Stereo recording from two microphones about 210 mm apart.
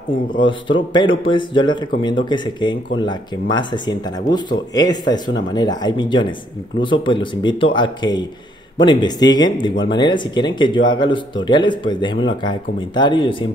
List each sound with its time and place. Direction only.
0.4 s speech: 25° left (ahead or behind)